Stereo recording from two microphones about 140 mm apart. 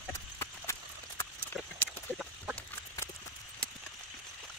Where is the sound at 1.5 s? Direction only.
Centre (ahead or behind).